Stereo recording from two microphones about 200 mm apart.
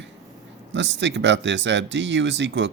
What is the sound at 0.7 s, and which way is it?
Speech, 60° right (ahead or behind).